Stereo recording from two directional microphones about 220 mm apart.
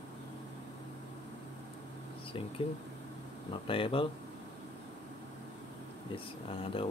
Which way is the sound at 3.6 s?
25° left (ahead or behind).